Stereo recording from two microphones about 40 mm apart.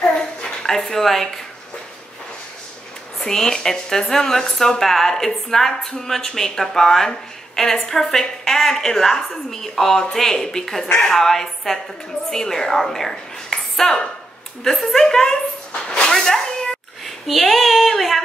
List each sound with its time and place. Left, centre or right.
0.7 s a woman's voice: centre
3.3 s a woman's voice: centre
15.7 s a sound: left
16.1 s cat: centre
17.0 s speech: centre